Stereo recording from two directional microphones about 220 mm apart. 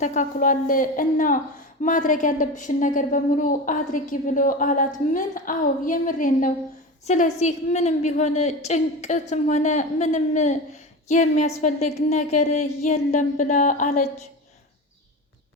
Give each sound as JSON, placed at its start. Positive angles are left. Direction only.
{"t": 0.0, "sound": "a woman's voice", "side_deg": 35}